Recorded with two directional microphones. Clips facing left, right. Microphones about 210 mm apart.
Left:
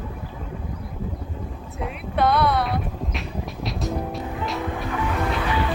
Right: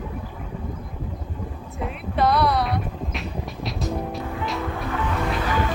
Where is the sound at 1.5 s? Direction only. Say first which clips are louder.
Even; centre (ahead or behind).